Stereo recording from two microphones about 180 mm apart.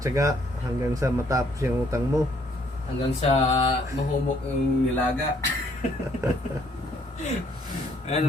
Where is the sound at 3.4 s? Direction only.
30° left (ahead or behind).